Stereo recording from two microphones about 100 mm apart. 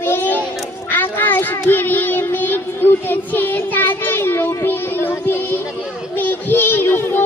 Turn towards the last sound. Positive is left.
turn(degrees=20)  # may be behind; listen again after turning